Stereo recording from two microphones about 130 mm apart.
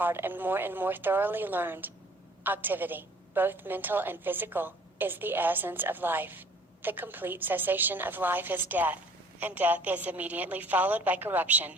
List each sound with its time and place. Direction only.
0.0 s a woman's voice: 15° right (ahead or behind)